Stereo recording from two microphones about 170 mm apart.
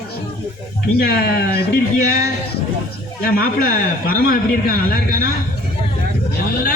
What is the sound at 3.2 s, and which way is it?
Speech, 60° left (ahead or behind).